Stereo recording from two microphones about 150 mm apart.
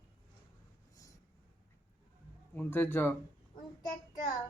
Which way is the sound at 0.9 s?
20° left (ahead or behind).